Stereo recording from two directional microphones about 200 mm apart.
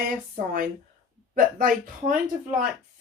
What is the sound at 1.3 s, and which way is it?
Speech, 45° right (ahead or behind).